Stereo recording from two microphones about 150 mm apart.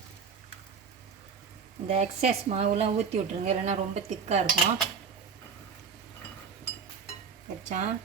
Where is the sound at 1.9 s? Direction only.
45° right (ahead or behind).